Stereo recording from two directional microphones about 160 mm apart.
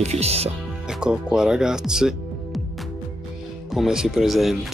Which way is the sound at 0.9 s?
5° right (ahead or behind).